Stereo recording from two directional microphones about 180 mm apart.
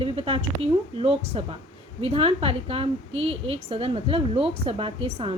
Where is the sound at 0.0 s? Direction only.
30° right (ahead or behind).